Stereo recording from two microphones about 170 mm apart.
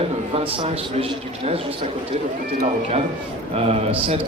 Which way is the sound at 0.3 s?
35° right (ahead or behind).